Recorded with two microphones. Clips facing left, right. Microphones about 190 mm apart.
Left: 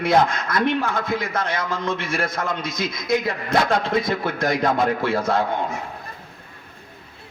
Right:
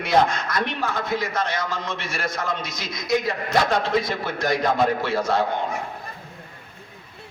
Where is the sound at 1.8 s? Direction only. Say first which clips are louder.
Left 5 dB; 55° left (ahead or behind).